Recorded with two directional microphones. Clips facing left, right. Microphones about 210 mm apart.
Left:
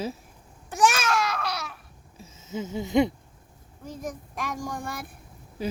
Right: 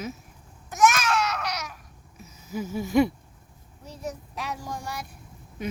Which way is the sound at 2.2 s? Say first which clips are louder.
Right 1 dB; 25° left (ahead or behind).